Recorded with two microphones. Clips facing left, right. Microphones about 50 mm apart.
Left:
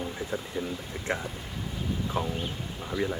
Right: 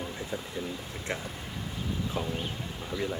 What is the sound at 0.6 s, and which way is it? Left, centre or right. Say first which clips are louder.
Speech: left 3 dB; centre.